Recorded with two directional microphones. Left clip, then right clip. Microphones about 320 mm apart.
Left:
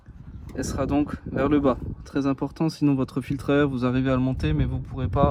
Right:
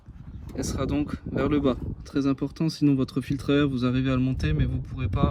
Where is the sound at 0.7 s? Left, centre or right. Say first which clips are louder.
Left 4 dB; centre.